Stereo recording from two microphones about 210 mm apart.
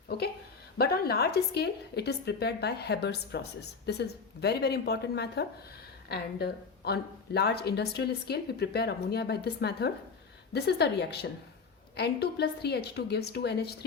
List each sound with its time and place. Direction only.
0.8 s a woman's voice: 50° left (ahead or behind)